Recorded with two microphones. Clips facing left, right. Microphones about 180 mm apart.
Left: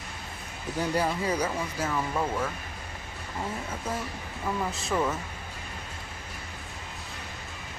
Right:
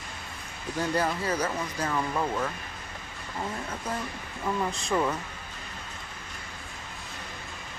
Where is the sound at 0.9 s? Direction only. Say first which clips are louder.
Left 1 dB; 10° left (ahead or behind).